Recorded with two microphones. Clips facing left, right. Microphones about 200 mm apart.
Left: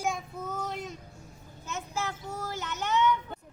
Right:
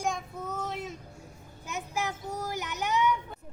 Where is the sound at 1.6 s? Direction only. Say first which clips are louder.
Right 1 dB; 15° right (ahead or behind).